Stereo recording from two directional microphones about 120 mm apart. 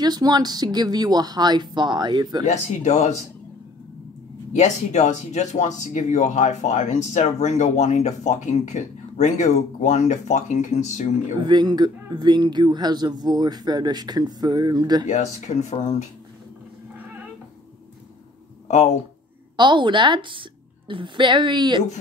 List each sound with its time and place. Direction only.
0.0 s speech: 35° right (ahead or behind)
2.4 s speech: 75° left (ahead or behind)
4.5 s speech: 80° left
11.4 s speech: 35° right (ahead or behind)
15.0 s speech: 75° left (ahead or behind)
18.7 s speech: 70° left (ahead or behind)
19.5 s a woman's voice: 40° right (ahead or behind)